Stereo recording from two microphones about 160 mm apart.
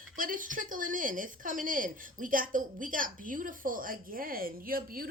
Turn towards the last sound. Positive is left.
turn(degrees=-65)  # may be behind; listen again after turning